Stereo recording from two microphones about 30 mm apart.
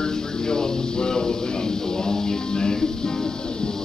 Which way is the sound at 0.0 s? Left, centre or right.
Left.